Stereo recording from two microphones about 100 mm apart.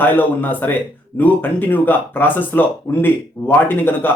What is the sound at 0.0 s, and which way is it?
Speech, 20° left (ahead or behind).